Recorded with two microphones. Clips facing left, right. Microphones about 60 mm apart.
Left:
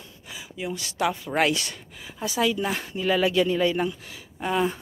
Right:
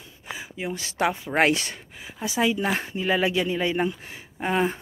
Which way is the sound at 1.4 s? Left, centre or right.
Right.